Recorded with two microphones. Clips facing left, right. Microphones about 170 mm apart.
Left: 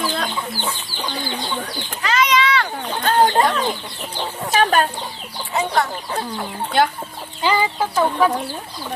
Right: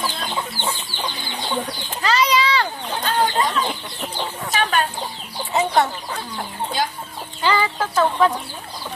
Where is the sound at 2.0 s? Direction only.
35° right (ahead or behind).